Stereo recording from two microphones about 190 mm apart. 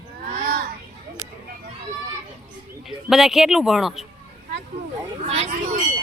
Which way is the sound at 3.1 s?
Centre (ahead or behind).